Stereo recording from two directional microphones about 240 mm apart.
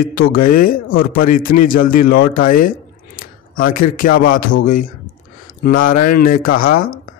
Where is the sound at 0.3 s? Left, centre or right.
Left.